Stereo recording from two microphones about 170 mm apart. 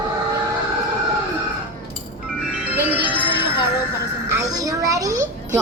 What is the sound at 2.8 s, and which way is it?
Music, 10° right (ahead or behind).